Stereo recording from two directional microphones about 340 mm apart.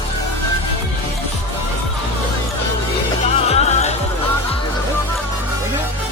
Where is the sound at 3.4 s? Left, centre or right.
Centre.